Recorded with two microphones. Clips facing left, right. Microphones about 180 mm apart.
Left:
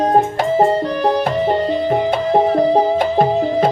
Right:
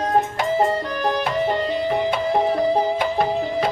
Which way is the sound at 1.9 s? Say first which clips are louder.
Left 5 dB; 45° left (ahead or behind).